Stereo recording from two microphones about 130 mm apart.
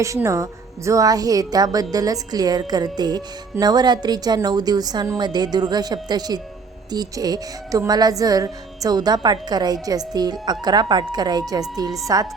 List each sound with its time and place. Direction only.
0.0 s a woman's voice: 25° right (ahead or behind)